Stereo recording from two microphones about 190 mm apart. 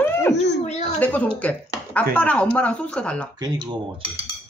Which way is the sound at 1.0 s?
5° left (ahead or behind).